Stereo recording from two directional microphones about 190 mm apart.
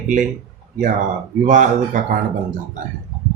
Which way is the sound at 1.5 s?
40° right (ahead or behind).